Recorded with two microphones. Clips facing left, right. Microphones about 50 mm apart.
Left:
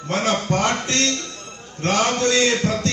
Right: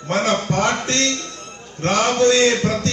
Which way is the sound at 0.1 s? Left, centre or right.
Right.